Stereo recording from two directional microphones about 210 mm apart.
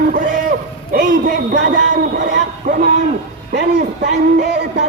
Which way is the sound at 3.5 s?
50° right (ahead or behind).